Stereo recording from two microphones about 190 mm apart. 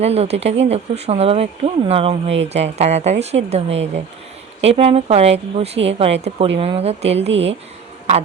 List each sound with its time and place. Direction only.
0.0 s speech: 35° right (ahead or behind)